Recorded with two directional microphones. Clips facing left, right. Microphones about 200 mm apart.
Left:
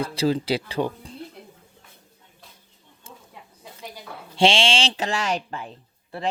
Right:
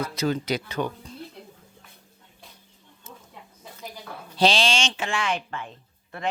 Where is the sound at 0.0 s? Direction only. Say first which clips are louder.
Left 3 dB; 30° left (ahead or behind).